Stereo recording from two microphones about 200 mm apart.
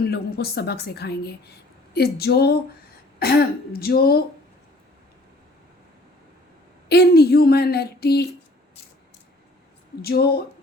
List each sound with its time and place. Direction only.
0.0 s speech: 55° left (ahead or behind)
6.8 s speech: 55° left (ahead or behind)
10.0 s speech: 50° left (ahead or behind)